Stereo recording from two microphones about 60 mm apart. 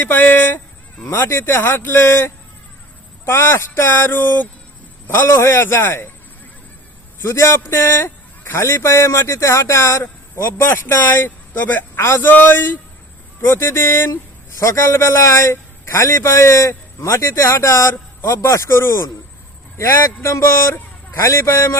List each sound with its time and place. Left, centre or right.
0.0 s speech: left
5.3 s speech: left
7.2 s a man's voice: left
11.9 s a man's voice: left
12.2 s speech: left
14.1 s a man's voice: left
20.7 s a sound: left
21.2 s a man's voice: left